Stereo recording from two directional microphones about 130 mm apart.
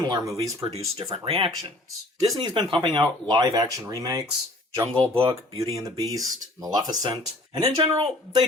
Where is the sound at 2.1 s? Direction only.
30° right (ahead or behind).